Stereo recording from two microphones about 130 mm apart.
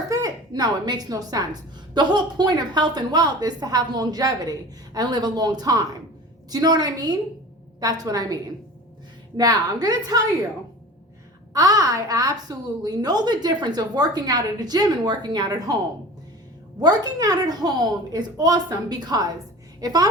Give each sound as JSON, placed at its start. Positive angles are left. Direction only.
{"t": 0.1, "sound": "a woman's voice", "side_deg": -30}
{"t": 9.4, "sound": "a woman's voice", "side_deg": -30}
{"t": 11.5, "sound": "a woman's voice", "side_deg": -25}
{"t": 16.8, "sound": "a woman's voice", "side_deg": -30}